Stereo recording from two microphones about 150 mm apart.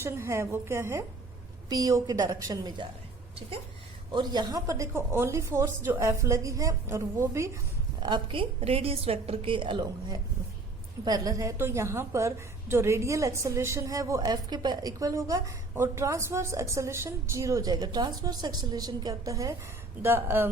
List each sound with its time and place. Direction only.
0.0 s a woman's voice: 15° right (ahead or behind)
4.1 s a woman's voice: 30° right (ahead or behind)
8.0 s a woman's voice: 30° right (ahead or behind); by 20.5 s 15° right (ahead or behind)